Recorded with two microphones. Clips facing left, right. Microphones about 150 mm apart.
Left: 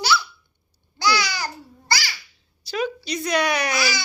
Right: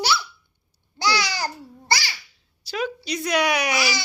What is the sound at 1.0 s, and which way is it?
Babbling, 35° right (ahead or behind).